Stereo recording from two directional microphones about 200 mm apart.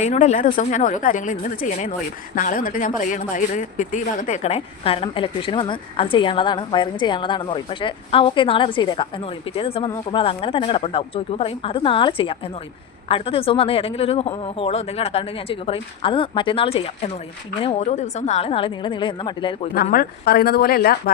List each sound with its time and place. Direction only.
0.0 s speech: 35° left (ahead or behind)
19.7 s speech: 50° left (ahead or behind)